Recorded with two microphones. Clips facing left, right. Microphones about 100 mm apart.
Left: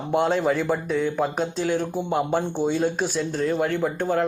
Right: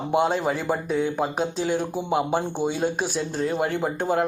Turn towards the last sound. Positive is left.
turn(degrees=-15)  # may be behind; listen again after turning